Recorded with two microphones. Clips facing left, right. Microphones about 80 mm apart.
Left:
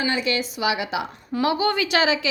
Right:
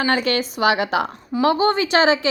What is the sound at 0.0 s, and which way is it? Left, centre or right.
A woman's voice, right.